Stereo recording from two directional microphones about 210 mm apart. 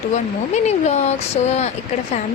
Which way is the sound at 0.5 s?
30° left (ahead or behind).